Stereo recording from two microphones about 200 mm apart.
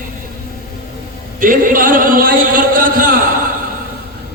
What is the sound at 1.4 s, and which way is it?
A man's voice, 45° right (ahead or behind).